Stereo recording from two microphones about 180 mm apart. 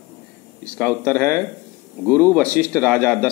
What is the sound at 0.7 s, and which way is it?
Speech, 5° left (ahead or behind).